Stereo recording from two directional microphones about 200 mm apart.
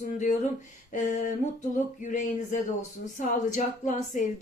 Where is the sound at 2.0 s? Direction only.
40° left (ahead or behind).